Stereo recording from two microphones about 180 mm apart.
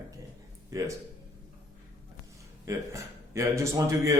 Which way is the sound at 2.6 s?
15° right (ahead or behind).